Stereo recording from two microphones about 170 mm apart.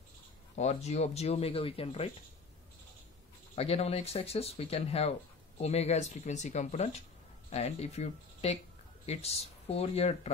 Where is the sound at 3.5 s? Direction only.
35° left (ahead or behind).